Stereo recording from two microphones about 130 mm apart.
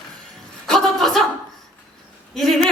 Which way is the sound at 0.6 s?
5° left (ahead or behind).